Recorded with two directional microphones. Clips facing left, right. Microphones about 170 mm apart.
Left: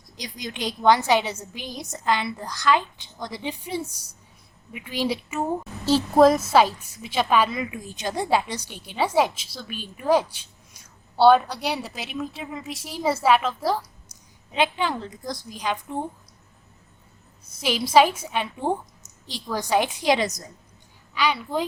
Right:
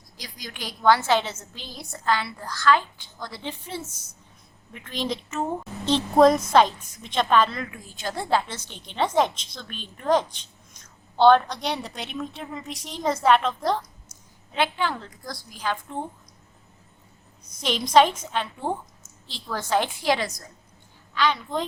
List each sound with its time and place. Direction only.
0.2 s a woman's voice: 20° left (ahead or behind); by 13.8 s 5° left (ahead or behind)
14.5 s a woman's voice: 15° left (ahead or behind)
17.6 s a woman's voice: 5° left (ahead or behind)